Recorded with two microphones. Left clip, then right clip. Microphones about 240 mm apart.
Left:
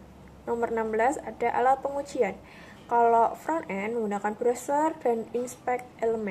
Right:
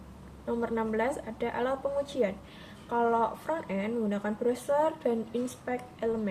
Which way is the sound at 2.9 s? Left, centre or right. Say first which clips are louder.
Left 6 dB; centre.